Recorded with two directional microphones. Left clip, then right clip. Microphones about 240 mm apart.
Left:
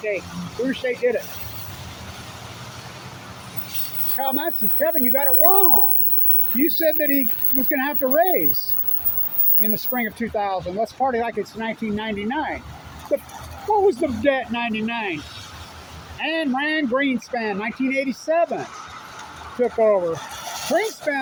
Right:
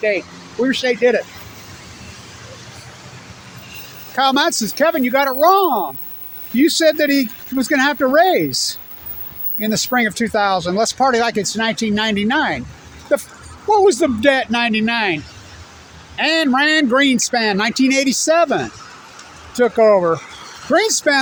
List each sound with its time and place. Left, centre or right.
0.7 s speech: right
4.2 s speech: right